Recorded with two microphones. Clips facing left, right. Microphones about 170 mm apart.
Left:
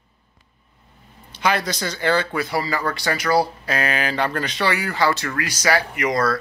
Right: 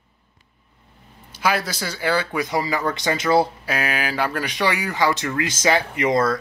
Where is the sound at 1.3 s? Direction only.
5° right (ahead or behind); by 3.5 s 25° right (ahead or behind).